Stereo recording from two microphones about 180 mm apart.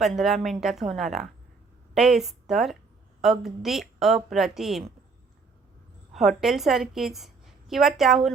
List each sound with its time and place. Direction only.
0.0 s a woman's voice: centre (ahead or behind)
6.1 s a woman's voice: centre (ahead or behind)